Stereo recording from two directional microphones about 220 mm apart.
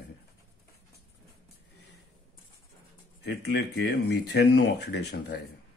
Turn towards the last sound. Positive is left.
turn(degrees=50)  # may be behind; listen again after turning